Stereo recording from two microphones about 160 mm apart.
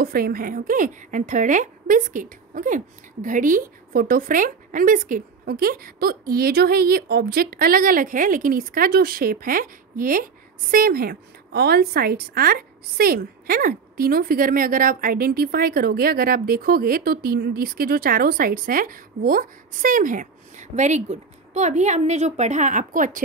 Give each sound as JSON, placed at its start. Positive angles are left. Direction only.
{"t": 0.0, "sound": "speech", "side_deg": -65}